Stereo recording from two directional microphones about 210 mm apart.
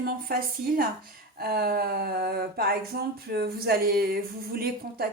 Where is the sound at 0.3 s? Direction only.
45° right (ahead or behind).